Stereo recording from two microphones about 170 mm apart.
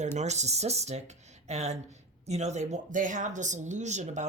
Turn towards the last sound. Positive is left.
turn(degrees=-45)  # may be behind; listen again after turning